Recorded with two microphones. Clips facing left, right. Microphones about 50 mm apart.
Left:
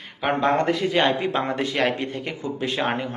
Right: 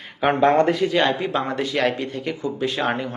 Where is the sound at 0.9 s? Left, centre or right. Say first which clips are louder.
Right 1 dB; left.